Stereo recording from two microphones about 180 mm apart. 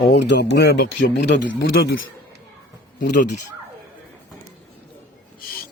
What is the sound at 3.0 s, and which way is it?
Speech, 45° left (ahead or behind).